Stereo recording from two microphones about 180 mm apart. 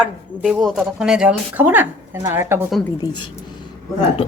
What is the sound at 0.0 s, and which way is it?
Speech, 5° right (ahead or behind).